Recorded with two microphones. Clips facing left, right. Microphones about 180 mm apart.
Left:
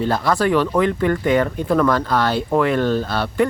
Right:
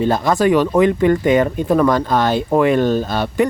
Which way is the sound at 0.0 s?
20° right (ahead or behind).